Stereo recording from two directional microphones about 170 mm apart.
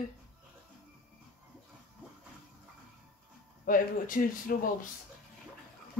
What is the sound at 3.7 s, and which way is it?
Speech, 55° left (ahead or behind).